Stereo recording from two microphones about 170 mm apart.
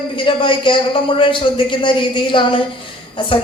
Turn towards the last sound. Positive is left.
turn(degrees=30)  # may be behind; listen again after turning